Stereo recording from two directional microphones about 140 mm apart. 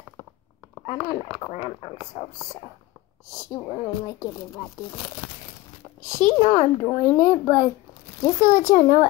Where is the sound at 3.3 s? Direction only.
25° left (ahead or behind).